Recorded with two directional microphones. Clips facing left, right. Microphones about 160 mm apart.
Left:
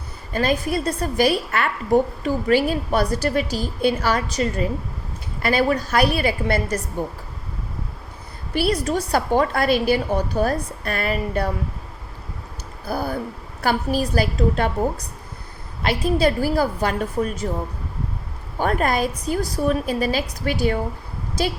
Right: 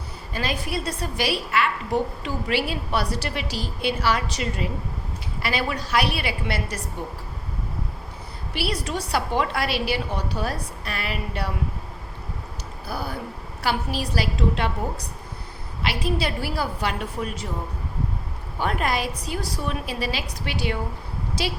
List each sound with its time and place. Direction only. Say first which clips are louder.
0.3 s a woman's voice: left 7 dB; 45° left (ahead or behind)
8.5 s a woman's voice: left 7 dB; 45° left (ahead or behind)
12.9 s a woman's voice: left 6 dB; 45° left (ahead or behind)
15.8 s a woman's voice: left 7 dB; 45° left (ahead or behind)
18.6 s a woman's voice: left 4 dB; 45° left (ahead or behind)